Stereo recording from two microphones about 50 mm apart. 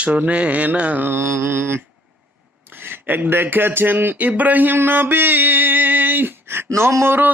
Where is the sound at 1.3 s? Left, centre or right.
Right.